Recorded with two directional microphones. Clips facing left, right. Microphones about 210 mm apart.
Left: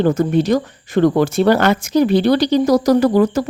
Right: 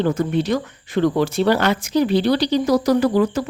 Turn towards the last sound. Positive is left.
turn(degrees=45)  # may be behind; listen again after turning